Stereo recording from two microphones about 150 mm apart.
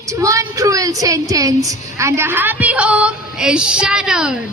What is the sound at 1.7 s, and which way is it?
A woman's voice, 20° right (ahead or behind).